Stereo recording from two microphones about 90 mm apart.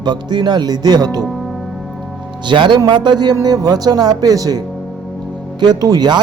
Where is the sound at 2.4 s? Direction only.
60° right (ahead or behind).